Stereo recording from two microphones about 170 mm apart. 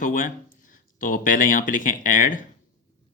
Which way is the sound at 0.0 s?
50° left (ahead or behind).